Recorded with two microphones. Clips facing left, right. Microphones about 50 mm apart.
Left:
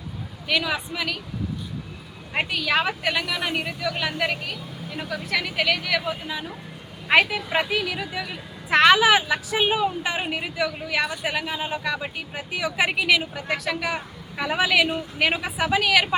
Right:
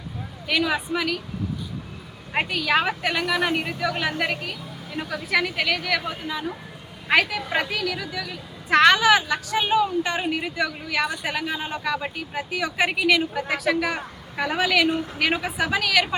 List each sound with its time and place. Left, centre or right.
0.4 s a woman's voice: centre
2.3 s a woman's voice: centre
7.1 s a woman's voice: centre
8.7 s a woman's voice: centre